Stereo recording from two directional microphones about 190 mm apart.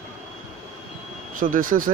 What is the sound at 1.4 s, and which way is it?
Speech, 45° right (ahead or behind).